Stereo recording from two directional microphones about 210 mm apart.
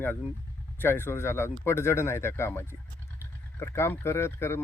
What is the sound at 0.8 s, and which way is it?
Speech, 10° left (ahead or behind).